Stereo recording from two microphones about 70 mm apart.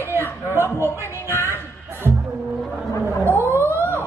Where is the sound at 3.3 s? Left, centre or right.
Right.